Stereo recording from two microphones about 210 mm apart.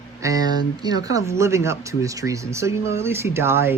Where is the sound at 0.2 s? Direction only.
15° right (ahead or behind).